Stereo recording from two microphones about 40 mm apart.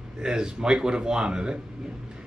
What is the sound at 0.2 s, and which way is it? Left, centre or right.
Speech, centre.